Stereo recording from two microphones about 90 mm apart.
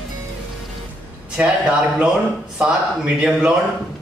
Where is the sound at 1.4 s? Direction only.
15° right (ahead or behind).